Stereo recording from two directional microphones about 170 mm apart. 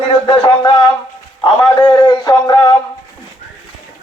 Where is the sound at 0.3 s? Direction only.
30° left (ahead or behind).